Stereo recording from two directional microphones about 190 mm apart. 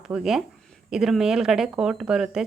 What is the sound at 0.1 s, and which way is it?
Speech, 5° right (ahead or behind).